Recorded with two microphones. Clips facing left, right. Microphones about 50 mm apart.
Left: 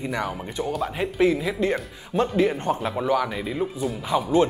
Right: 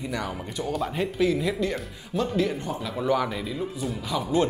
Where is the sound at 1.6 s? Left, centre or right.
Left.